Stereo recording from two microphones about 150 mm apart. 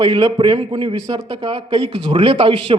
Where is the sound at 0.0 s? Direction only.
25° right (ahead or behind).